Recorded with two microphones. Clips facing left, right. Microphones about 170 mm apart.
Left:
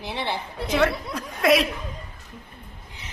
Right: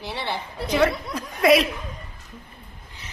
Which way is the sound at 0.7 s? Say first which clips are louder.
Right 1 dB; centre (ahead or behind).